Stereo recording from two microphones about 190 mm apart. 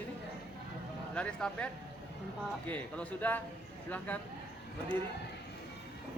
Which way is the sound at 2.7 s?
10° left (ahead or behind).